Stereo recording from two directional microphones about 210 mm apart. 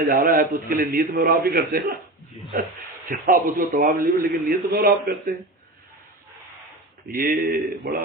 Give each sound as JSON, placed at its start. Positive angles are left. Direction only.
{"t": 0.1, "sound": "a man's voice", "side_deg": -40}
{"t": 3.1, "sound": "a man's voice", "side_deg": -40}
{"t": 7.1, "sound": "a man's voice", "side_deg": -40}